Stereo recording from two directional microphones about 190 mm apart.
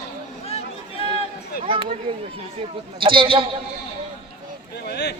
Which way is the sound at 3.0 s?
25° right (ahead or behind).